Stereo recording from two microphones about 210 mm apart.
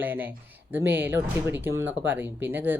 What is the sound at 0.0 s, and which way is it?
Speech, 10° right (ahead or behind).